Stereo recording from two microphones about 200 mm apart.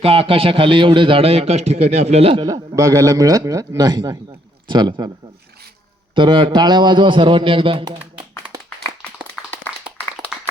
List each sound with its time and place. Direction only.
0.0 s a man's voice: 30° right (ahead or behind)
6.1 s a man's voice: 25° right (ahead or behind)
8.2 s clapping: 15° right (ahead or behind)
9.0 s clapping: centre (ahead or behind)